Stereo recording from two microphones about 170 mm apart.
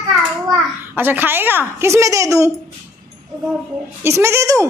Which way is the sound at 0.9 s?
10° right (ahead or behind).